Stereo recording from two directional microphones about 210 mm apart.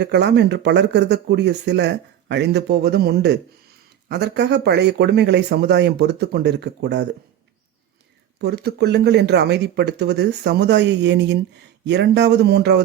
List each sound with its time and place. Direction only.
0.0 s speech: 55° right (ahead or behind)
8.4 s speech: 50° right (ahead or behind)